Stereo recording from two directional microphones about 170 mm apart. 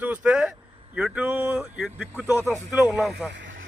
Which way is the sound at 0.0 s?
10° right (ahead or behind).